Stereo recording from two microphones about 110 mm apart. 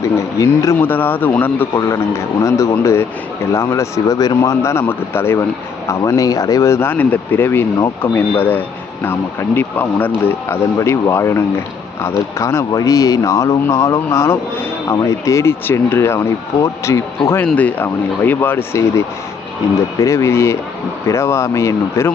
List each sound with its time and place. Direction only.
0.0 s speech: 25° left (ahead or behind)
17.4 s speech: 15° left (ahead or behind)